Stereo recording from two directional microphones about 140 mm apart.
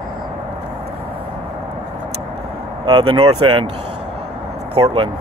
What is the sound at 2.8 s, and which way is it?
Speech, 40° right (ahead or behind).